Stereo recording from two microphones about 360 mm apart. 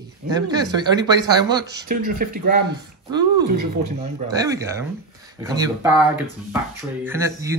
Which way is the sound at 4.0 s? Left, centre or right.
Centre.